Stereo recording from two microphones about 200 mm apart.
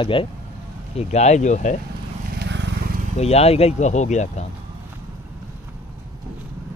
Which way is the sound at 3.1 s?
30° left (ahead or behind).